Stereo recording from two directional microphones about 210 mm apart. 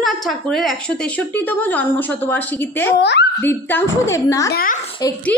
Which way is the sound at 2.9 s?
55° left (ahead or behind).